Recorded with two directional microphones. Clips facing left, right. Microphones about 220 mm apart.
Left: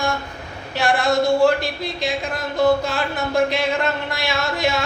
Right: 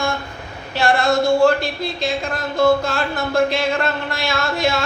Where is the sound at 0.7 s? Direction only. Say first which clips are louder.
Right 1 dB; 15° left (ahead or behind).